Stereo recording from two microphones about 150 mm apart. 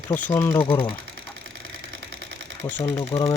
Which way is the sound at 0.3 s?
20° left (ahead or behind).